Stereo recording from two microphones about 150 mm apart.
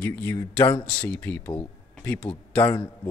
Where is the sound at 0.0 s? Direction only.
10° left (ahead or behind).